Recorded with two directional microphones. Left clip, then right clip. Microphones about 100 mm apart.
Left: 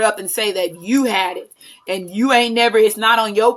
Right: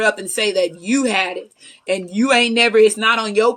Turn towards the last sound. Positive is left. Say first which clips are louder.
# left 2 dB
turn(degrees=30)  # may be behind; listen again after turning